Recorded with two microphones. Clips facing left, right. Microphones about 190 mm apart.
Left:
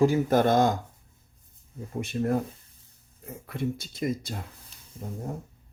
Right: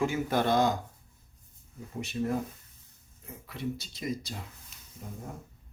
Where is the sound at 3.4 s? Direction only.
50° left (ahead or behind).